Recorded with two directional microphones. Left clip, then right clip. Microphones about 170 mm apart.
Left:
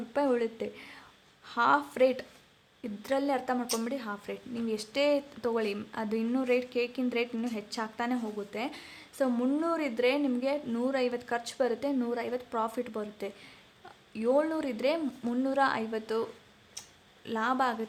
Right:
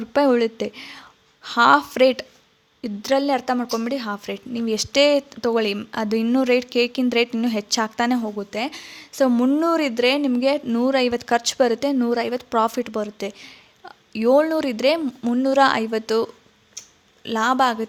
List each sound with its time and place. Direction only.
0.1 s a woman's voice: 40° right (ahead or behind)